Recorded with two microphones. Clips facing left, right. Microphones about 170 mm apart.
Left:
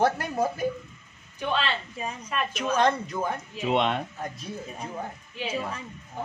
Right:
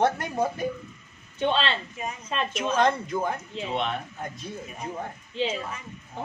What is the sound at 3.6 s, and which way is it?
Speech, 75° left (ahead or behind).